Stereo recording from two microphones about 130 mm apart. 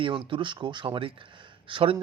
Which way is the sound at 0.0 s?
40° right (ahead or behind).